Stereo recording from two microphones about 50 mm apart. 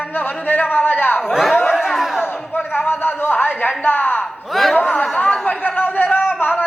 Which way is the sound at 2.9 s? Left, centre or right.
Left.